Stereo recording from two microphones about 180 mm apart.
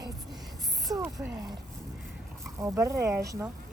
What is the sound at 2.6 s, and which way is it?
Speech, 15° right (ahead or behind).